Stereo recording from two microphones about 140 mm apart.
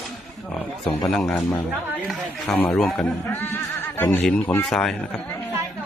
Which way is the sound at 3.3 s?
15° left (ahead or behind).